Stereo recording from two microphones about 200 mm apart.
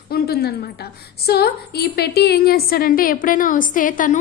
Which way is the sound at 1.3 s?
55° left (ahead or behind).